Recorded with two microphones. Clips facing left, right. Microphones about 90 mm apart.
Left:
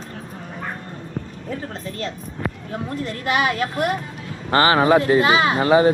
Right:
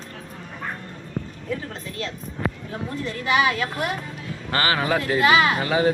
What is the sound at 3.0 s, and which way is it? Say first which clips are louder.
Speech: even; 50° left (ahead or behind).